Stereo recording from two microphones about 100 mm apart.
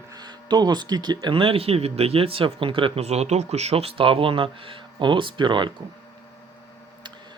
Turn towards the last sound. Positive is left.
turn(degrees=-50)  # may be behind; listen again after turning